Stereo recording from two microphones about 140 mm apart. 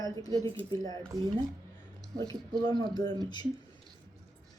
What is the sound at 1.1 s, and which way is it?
Speech, 25° right (ahead or behind).